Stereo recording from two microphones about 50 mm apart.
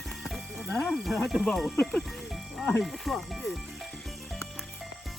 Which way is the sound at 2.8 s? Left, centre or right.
Centre.